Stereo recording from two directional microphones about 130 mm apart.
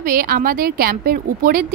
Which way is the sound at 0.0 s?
90° right.